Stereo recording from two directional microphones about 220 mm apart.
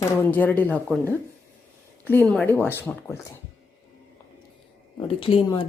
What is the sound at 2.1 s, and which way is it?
Speech, 5° left (ahead or behind).